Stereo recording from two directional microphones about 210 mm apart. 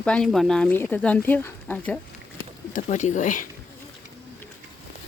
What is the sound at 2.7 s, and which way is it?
Speech, 35° left (ahead or behind).